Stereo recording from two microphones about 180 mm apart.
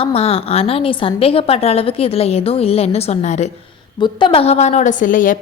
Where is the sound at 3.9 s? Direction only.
25° left (ahead or behind); by 5.4 s 50° left (ahead or behind).